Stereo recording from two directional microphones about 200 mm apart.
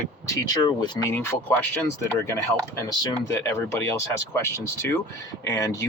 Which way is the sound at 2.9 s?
15° left (ahead or behind).